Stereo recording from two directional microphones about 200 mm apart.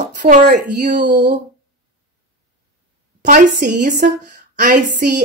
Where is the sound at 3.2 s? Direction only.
40° right (ahead or behind).